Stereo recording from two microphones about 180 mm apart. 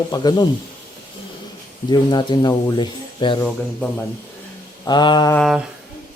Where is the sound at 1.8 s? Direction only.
25° left (ahead or behind).